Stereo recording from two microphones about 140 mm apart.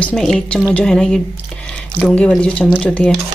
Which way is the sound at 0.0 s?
Centre (ahead or behind).